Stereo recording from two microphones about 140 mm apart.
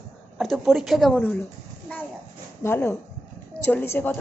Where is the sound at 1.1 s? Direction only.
15° left (ahead or behind).